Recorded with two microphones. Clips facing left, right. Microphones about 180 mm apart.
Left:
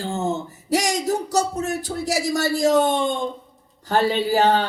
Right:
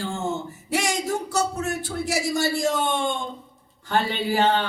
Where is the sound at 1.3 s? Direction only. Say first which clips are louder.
Left 3 dB; 40° left (ahead or behind).